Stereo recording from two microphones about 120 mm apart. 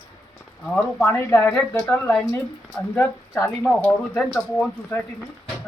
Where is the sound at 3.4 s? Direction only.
10° left (ahead or behind).